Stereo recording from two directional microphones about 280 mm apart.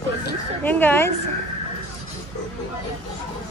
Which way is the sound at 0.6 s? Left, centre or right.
Centre.